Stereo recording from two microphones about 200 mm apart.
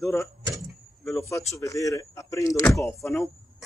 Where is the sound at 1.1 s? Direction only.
15° left (ahead or behind).